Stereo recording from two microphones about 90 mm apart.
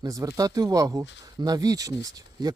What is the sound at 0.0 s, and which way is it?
Speech, 40° right (ahead or behind).